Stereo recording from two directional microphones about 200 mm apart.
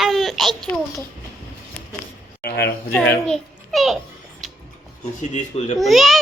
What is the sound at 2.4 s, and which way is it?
Speech, 55° left (ahead or behind).